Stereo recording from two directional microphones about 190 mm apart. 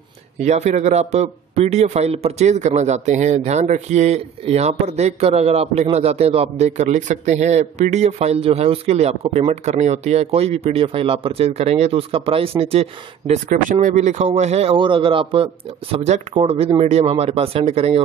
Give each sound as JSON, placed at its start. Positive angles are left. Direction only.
{"t": 0.4, "sound": "a man's voice", "side_deg": -35}